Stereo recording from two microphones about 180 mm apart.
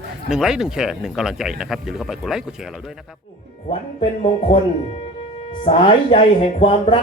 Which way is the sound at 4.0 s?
30° left (ahead or behind).